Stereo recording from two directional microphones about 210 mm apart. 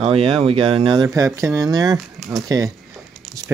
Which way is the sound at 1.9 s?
Centre (ahead or behind).